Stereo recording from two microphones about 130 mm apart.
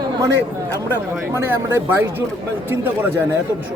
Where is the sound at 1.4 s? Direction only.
20° right (ahead or behind).